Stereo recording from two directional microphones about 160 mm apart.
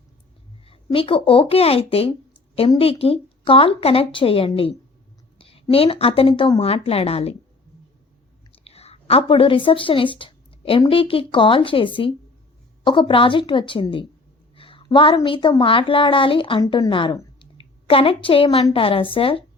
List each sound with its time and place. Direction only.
0.6 s speech: 35° left (ahead or behind)
5.4 s a sound: 35° left (ahead or behind)
5.7 s speech: 35° left (ahead or behind)
8.6 s a woman's voice: 40° left (ahead or behind)